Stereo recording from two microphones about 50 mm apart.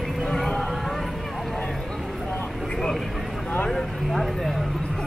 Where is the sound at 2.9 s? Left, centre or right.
Centre.